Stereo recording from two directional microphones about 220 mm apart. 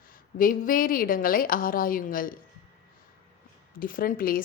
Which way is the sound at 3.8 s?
40° left (ahead or behind).